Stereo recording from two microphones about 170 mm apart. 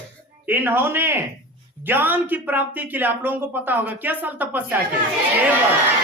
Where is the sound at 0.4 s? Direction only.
10° right (ahead or behind).